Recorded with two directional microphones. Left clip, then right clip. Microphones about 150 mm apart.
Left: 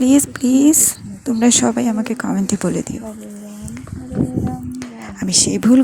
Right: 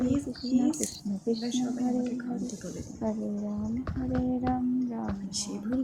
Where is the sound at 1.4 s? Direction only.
90° left.